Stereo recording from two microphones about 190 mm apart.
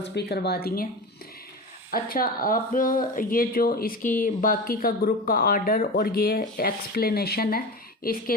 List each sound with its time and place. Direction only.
0.0 s speech: 60° left (ahead or behind)
1.9 s speech: 50° left (ahead or behind)